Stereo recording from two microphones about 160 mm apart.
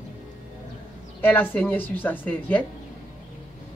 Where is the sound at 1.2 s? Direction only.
10° left (ahead or behind).